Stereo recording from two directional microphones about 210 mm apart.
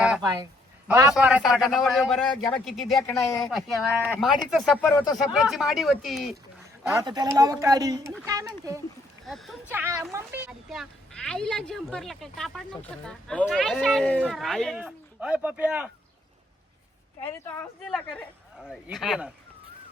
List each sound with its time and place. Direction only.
0.9 s a man's voice: 15° right (ahead or behind); by 4.9 s centre (ahead or behind)
4.9 s speech: 15° left (ahead or behind)
5.1 s a woman's voice: centre (ahead or behind)
6.9 s speech: 20° right (ahead or behind)
9.2 s a woman's voice: centre (ahead or behind)
9.7 s a woman's voice: 10° right (ahead or behind)
18.6 s a woman's voice: centre (ahead or behind)